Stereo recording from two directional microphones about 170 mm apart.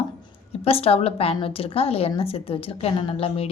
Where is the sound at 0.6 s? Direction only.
35° left (ahead or behind).